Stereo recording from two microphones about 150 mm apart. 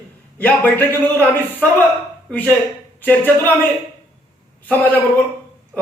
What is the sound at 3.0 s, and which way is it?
Speech, 10° left (ahead or behind).